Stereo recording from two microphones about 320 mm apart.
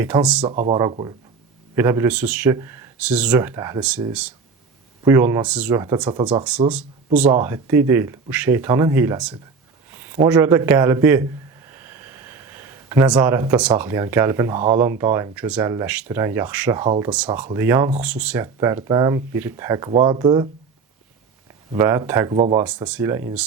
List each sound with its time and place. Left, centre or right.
0.0 s speech: centre
0.4 s a man's voice: centre
11.7 s a sound: centre
14.6 s speech: centre
21.7 s speech: centre